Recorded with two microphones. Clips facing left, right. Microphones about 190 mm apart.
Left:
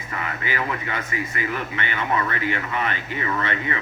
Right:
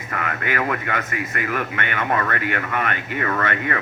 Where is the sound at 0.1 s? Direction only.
60° right (ahead or behind).